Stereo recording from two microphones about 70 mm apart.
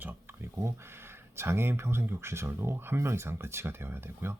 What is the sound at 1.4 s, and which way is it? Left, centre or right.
Speech, right.